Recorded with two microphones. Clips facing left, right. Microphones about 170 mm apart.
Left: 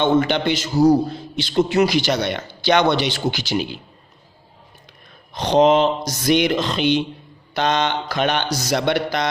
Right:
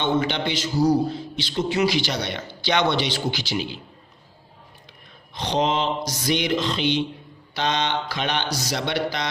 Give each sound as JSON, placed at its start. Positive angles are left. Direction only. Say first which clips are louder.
{"t": 0.0, "sound": "a man's voice", "louder": "left 6 dB", "side_deg": 50}
{"t": 5.3, "sound": "a man's voice", "louder": "left 8 dB", "side_deg": 45}